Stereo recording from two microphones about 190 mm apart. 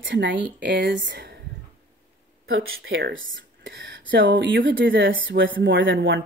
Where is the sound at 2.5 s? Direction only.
90° right.